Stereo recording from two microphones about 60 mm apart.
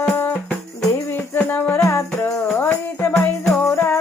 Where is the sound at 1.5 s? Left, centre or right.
Left.